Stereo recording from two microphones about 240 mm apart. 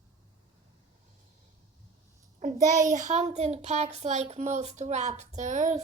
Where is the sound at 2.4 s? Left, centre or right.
Right.